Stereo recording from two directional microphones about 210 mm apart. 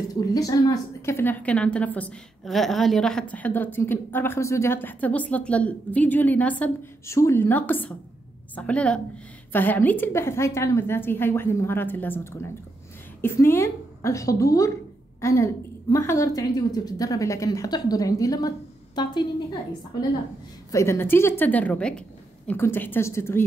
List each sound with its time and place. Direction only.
0.1 s a woman's voice: 15° left (ahead or behind)
19.9 s a woman's voice: 20° left (ahead or behind)